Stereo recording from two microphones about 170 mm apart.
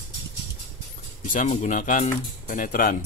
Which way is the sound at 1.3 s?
45° left (ahead or behind).